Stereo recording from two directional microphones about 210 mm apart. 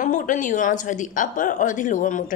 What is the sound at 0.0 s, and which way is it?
A woman's voice, 40° left (ahead or behind).